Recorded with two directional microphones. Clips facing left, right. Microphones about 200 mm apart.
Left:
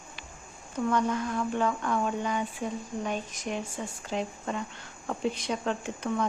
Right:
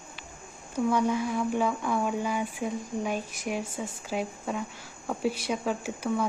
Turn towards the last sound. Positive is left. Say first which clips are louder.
# right 1 dB
turn(degrees=-5)  # may be behind; listen again after turning